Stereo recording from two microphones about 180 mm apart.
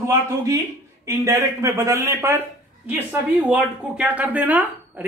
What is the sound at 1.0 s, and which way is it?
Speech, 15° right (ahead or behind).